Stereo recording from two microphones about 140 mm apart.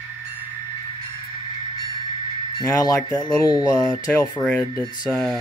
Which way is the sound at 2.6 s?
25° left (ahead or behind).